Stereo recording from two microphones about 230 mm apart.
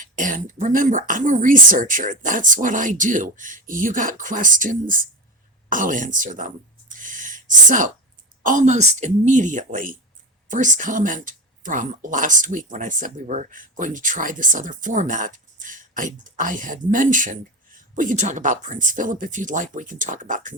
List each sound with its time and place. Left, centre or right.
0.0 s speech: right
6.9 s a sound: right
8.4 s speech: right